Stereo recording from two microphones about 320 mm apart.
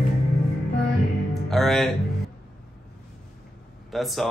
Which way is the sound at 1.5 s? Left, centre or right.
Centre.